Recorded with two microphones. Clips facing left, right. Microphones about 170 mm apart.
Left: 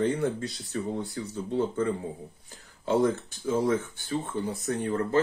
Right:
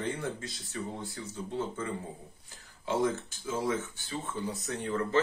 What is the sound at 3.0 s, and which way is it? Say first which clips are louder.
Speech: left 4 dB; 60° left (ahead or behind).